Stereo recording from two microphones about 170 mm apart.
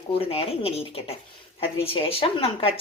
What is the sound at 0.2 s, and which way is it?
A woman's voice, 35° left (ahead or behind).